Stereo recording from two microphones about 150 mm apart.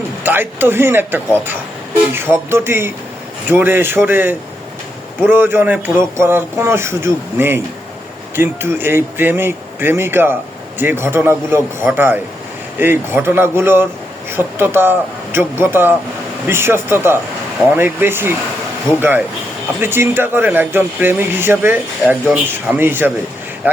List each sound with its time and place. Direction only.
0.2 s speech: 15° right (ahead or behind)
19.8 s speech: 15° right (ahead or behind)